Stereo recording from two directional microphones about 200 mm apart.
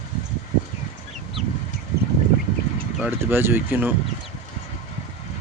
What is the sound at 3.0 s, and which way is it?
Speech, 10° right (ahead or behind).